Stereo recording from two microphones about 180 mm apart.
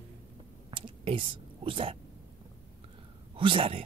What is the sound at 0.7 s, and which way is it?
Whispering, 30° right (ahead or behind).